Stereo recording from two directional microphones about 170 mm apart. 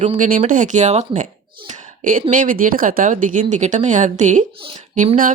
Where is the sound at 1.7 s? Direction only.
45° right (ahead or behind).